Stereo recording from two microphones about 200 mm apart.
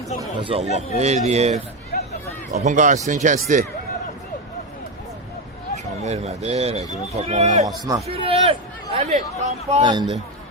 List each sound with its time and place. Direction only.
0.2 s speech: 25° right (ahead or behind)
1.9 s hubbub: 40° left (ahead or behind)
2.5 s speech: 35° right (ahead or behind)
5.7 s speech: 35° right (ahead or behind)
9.8 s speech: 20° right (ahead or behind)